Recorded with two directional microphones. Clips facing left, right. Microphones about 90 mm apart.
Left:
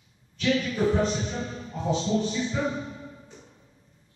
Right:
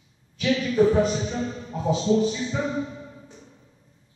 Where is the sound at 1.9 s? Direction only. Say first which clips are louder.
Right 5 dB; 5° right (ahead or behind).